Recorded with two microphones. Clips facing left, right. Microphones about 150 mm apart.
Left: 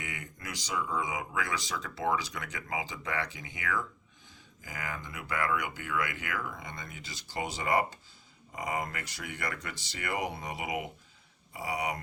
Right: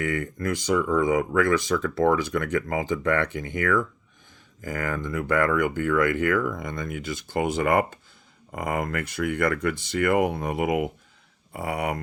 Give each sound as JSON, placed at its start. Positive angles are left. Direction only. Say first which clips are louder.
{"t": 0.0, "sound": "speech", "louder": "right 16 dB", "side_deg": -55}